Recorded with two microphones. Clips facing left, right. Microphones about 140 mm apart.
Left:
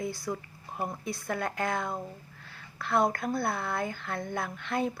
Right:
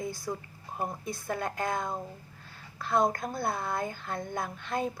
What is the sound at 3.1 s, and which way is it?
Speech, 20° right (ahead or behind).